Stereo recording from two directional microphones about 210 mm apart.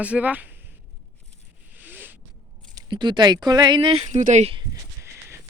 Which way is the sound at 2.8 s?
20° right (ahead or behind).